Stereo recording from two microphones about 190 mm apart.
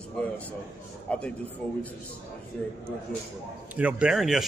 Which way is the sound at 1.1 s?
5° left (ahead or behind).